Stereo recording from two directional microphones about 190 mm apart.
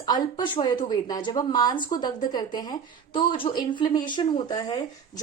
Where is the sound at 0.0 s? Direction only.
20° left (ahead or behind).